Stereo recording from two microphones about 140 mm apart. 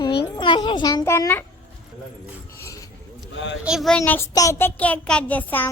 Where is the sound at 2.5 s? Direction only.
20° left (ahead or behind).